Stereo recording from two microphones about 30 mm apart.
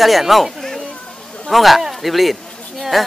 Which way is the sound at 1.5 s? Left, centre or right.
Centre.